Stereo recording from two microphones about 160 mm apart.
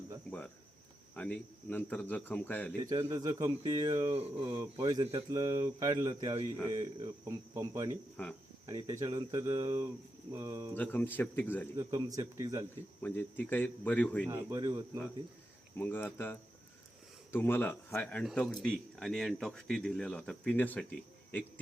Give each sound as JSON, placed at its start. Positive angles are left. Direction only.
{"t": 0.3, "sound": "speech", "side_deg": 10}
{"t": 2.8, "sound": "speech", "side_deg": -20}
{"t": 4.1, "sound": "speech", "side_deg": -35}
{"t": 8.1, "sound": "speech", "side_deg": 5}
{"t": 8.6, "sound": "speech", "side_deg": -20}
{"t": 10.8, "sound": "speech", "side_deg": 10}
{"t": 11.8, "sound": "speech", "side_deg": -20}
{"t": 13.0, "sound": "speech", "side_deg": 10}
{"t": 14.3, "sound": "speech", "side_deg": -25}
{"t": 15.8, "sound": "speech", "side_deg": 10}